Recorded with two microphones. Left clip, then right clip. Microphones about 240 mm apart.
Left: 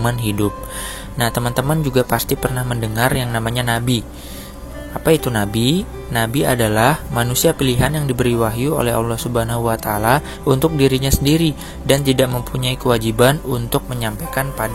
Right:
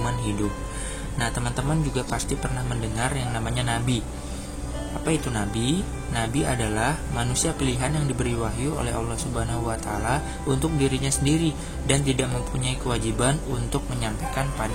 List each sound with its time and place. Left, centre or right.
1.1 s speech: left
5.0 s speech: left